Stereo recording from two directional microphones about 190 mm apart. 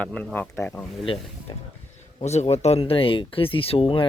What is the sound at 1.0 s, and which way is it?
Speech, 30° left (ahead or behind).